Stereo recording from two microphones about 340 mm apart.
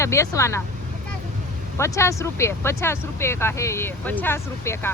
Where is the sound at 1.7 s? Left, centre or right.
Centre.